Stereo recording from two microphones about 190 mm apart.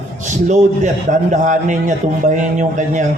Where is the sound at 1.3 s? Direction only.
40° right (ahead or behind).